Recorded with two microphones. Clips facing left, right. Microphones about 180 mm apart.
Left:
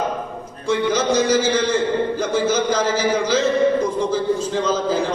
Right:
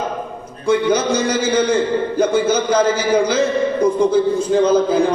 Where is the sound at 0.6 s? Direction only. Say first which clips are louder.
Right 4 dB; 60° right (ahead or behind).